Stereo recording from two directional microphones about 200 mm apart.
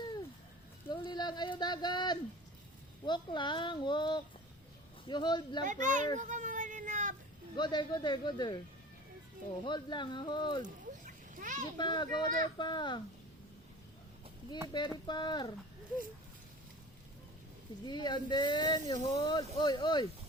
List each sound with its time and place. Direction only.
0.9 s speech: 20° left (ahead or behind)
5.6 s a child's voice: 40° right (ahead or behind)
6.1 s a sound: 40° right (ahead or behind)
7.5 s speech: 20° left (ahead or behind)
9.6 s speech: 20° left (ahead or behind)
10.6 s a sound: 40° right (ahead or behind)
11.8 s speech: 20° left (ahead or behind)
14.7 s speech: 20° left (ahead or behind)
17.8 s speech: 20° left (ahead or behind)